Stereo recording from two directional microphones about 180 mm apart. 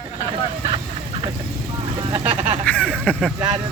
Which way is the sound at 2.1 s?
35° right (ahead or behind).